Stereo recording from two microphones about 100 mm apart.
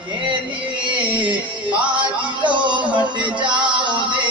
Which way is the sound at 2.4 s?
55° right (ahead or behind).